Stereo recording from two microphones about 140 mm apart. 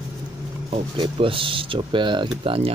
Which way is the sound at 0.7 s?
35° right (ahead or behind).